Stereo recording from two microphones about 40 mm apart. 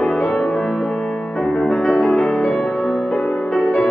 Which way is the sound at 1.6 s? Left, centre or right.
Centre.